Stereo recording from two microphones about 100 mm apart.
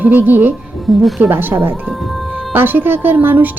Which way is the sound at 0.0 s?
20° right (ahead or behind).